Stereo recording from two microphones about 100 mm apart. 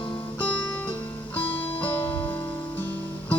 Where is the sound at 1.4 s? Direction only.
15° left (ahead or behind).